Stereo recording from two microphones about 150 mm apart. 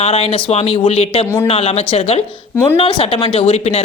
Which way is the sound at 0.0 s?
45° left (ahead or behind).